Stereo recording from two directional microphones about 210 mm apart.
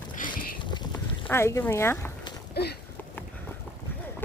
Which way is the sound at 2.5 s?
50° left (ahead or behind).